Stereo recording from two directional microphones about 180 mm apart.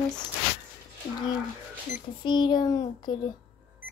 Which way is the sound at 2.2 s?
25° left (ahead or behind).